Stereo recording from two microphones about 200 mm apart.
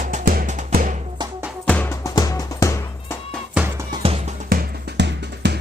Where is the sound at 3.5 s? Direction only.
10° right (ahead or behind).